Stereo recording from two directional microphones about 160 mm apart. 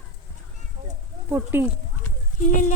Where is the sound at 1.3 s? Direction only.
15° right (ahead or behind).